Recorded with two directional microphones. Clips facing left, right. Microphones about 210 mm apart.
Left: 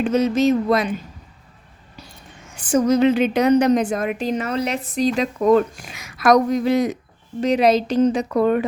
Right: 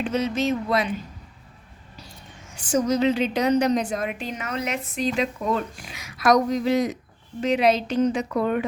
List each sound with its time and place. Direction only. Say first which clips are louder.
0.0 s a woman's voice: left 7 dB; 40° left (ahead or behind)
2.6 s a woman's voice: left 5 dB; 55° left (ahead or behind)
7.4 s a woman's voice: left 4 dB; 40° left (ahead or behind)